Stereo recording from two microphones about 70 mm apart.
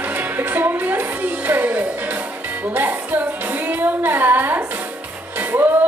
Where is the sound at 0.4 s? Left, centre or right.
Right.